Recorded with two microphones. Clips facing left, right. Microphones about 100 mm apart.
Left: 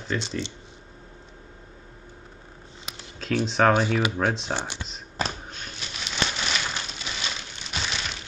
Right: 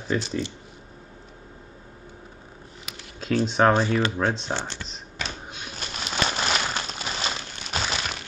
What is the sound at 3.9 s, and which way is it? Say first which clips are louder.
Speech: right 1 dB; 15° left (ahead or behind).